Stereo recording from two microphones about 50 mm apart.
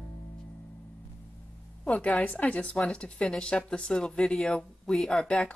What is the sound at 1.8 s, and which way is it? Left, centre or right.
A woman's voice, left.